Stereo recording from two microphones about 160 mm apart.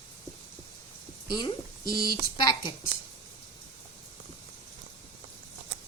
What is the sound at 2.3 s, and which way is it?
Speech, 30° left (ahead or behind).